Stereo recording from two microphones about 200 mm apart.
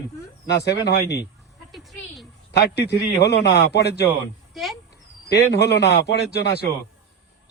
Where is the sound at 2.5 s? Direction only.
55° left (ahead or behind).